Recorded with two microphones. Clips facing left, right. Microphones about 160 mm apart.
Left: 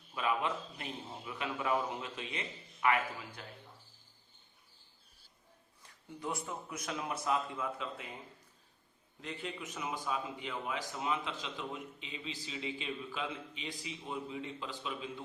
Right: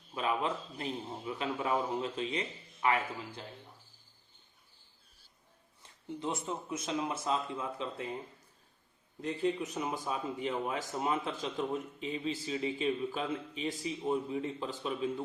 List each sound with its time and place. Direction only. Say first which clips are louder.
0.1 s a man's voice: right 1 dB; 30° right (ahead or behind)
5.8 s speech: right 4 dB; 25° right (ahead or behind)
9.2 s a man's voice: right 10 dB; 40° right (ahead or behind)